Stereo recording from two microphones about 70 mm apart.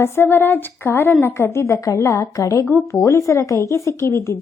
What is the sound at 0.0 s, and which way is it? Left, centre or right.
A woman's voice, left.